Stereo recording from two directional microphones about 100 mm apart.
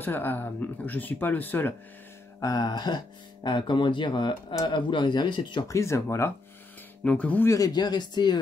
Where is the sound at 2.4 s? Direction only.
40° left (ahead or behind).